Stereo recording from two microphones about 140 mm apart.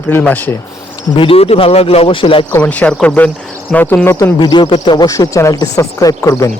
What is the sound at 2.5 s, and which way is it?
A man's voice, 10° left (ahead or behind).